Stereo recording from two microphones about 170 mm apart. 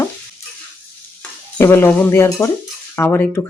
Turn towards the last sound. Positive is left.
turn(degrees=15)  # may be behind; listen again after turning